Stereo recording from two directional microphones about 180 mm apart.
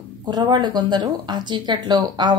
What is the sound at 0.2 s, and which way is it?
Speech, 25° right (ahead or behind).